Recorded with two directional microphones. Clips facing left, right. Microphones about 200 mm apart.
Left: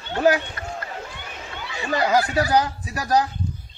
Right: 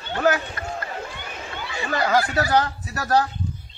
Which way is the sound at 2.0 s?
15° left (ahead or behind).